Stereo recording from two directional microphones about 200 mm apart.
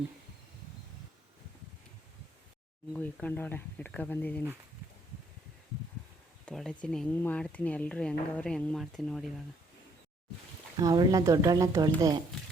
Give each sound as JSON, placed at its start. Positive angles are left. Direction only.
{"t": 2.9, "sound": "speech", "side_deg": 10}
{"t": 6.4, "sound": "speech", "side_deg": 0}
{"t": 10.8, "sound": "speech", "side_deg": -20}